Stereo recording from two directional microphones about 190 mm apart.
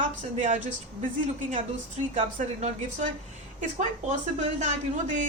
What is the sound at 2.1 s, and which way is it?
Speech, 35° right (ahead or behind).